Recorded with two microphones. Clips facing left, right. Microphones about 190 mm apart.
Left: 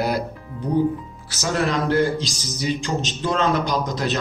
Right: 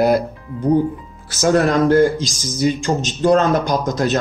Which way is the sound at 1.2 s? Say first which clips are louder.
Right 8 dB; 50° right (ahead or behind).